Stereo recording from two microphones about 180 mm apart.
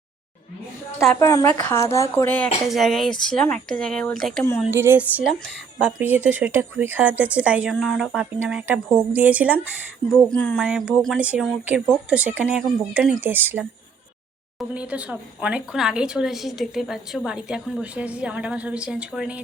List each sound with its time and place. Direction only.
1.2 s a woman's voice: 15° left (ahead or behind)
2.6 s speech: centre (ahead or behind)
4.6 s speech: 15° right (ahead or behind)
10.3 s speech: 5° left (ahead or behind)